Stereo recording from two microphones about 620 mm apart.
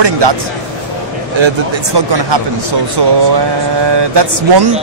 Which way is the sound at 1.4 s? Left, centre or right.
Right.